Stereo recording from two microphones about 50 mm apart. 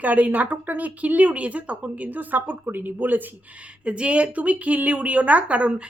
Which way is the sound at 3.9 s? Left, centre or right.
Right.